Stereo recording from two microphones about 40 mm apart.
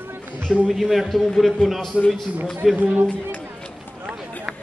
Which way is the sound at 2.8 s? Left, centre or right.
Right.